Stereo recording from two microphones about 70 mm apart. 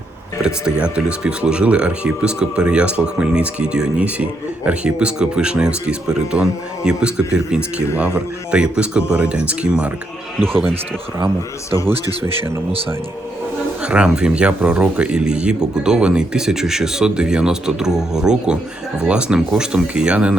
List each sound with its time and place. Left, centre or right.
0.4 s speech: centre
13.8 s speech: centre